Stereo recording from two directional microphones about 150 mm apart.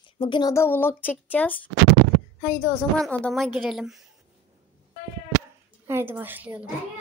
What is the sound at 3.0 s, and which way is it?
A woman's voice, 5° left (ahead or behind).